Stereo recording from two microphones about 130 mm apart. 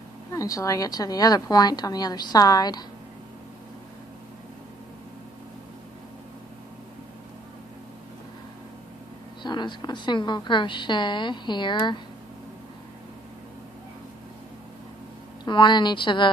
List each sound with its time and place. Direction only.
0.3 s a woman's voice: 25° left (ahead or behind)
9.4 s a woman's voice: 35° left (ahead or behind)
15.4 s a woman's voice: 35° left (ahead or behind)